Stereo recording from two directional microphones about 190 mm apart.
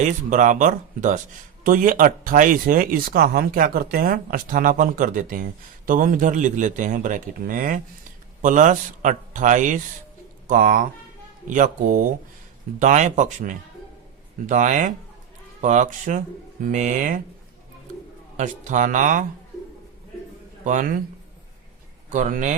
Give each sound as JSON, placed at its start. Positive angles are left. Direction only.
{"t": 0.0, "sound": "a man's voice", "side_deg": -40}
{"t": 18.3, "sound": "a man's voice", "side_deg": -40}
{"t": 20.7, "sound": "speech", "side_deg": -45}
{"t": 22.1, "sound": "a man's voice", "side_deg": -40}